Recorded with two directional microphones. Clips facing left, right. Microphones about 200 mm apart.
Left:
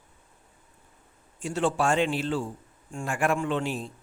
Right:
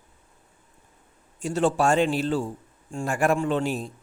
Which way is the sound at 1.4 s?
40° right (ahead or behind).